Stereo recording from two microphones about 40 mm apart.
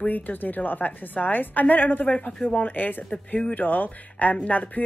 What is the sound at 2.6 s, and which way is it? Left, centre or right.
Speech, left.